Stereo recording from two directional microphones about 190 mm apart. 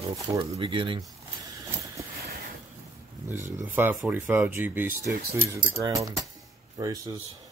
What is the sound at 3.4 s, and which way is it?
Speech, 10° right (ahead or behind).